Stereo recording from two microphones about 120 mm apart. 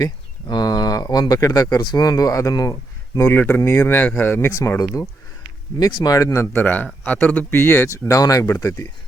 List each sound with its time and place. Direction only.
0.0 s speech: 35° left (ahead or behind)
3.2 s speech: 15° left (ahead or behind)